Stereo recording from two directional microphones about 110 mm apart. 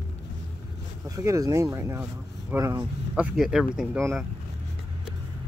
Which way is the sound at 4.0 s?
25° right (ahead or behind).